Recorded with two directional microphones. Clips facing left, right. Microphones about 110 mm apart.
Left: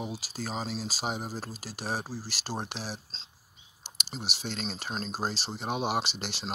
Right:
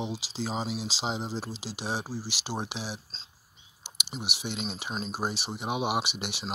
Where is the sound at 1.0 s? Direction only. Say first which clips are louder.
Right 2 dB; 25° right (ahead or behind).